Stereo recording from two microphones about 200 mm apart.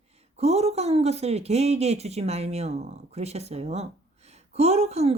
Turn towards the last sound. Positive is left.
turn(degrees=-35)  # may be behind; listen again after turning